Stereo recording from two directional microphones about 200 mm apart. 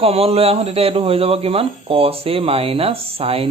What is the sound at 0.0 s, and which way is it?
Speech, 30° right (ahead or behind).